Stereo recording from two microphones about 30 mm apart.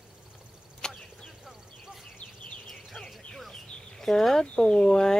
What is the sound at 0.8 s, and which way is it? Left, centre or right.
Arrow, left.